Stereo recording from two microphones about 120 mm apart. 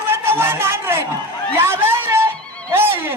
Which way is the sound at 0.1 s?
20° right (ahead or behind).